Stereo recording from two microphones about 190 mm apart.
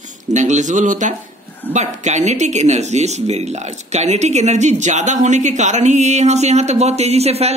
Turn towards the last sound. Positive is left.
turn(degrees=-35)  # may be behind; listen again after turning